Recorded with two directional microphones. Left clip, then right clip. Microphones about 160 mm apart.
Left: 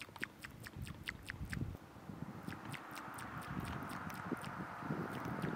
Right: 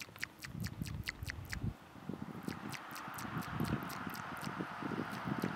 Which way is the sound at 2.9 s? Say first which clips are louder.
Right 4 dB; 35° right (ahead or behind).